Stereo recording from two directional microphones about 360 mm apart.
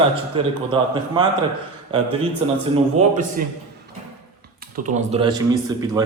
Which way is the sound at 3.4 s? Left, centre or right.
Right.